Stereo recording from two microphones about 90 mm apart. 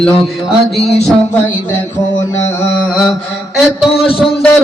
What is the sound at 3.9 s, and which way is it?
Music, 90° left.